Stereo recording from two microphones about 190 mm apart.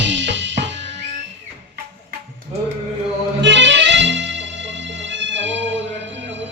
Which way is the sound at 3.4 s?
70° right (ahead or behind).